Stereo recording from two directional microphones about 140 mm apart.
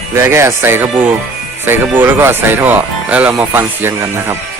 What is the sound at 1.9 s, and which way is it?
Speech, 15° right (ahead or behind).